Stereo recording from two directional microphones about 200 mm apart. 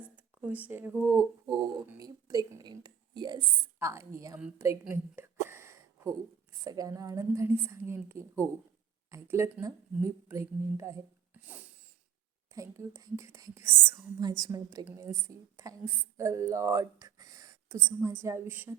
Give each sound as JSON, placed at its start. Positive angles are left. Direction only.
{"t": 0.4, "sound": "a woman's voice", "side_deg": -10}
{"t": 12.5, "sound": "speech", "side_deg": -15}